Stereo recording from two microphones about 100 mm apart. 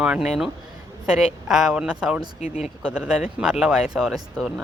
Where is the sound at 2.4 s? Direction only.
90° left.